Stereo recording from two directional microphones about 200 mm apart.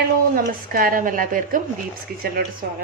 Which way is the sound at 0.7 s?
45° right (ahead or behind).